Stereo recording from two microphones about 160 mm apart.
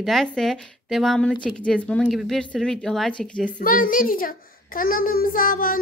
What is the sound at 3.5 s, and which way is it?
A child's voice, 60° left (ahead or behind).